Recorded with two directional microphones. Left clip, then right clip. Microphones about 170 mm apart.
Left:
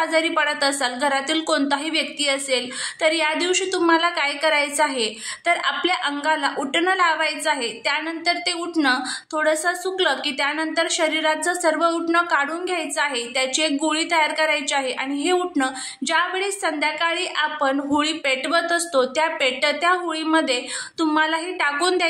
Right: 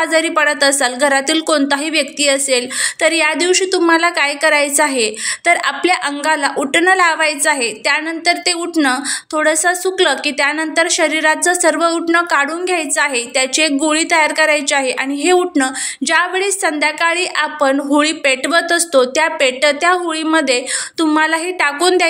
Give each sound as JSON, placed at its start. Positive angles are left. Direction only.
{"t": 0.0, "sound": "a woman's voice", "side_deg": -20}